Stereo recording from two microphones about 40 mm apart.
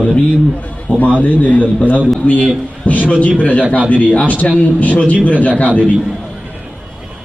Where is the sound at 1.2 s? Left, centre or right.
Left.